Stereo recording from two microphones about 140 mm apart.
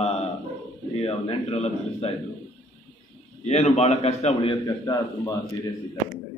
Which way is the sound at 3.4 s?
50° left (ahead or behind).